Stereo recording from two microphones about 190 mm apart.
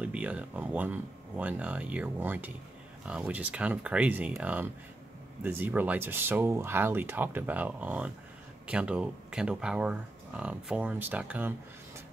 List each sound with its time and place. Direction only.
0.0 s speech: 5° right (ahead or behind)